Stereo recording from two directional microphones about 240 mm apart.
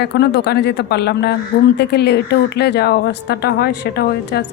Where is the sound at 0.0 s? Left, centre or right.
Left.